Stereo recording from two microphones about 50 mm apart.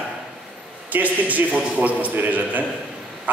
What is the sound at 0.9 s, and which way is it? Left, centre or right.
A man's voice, right.